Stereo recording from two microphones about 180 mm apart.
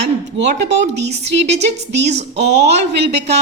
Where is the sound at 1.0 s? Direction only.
35° right (ahead or behind).